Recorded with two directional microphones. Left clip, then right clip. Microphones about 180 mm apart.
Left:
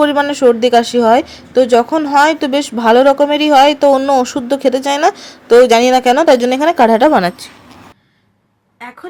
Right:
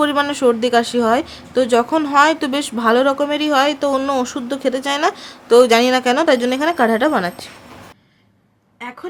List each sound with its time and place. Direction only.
0.0 s speech: 10° left (ahead or behind)
7.2 s speech: 30° left (ahead or behind)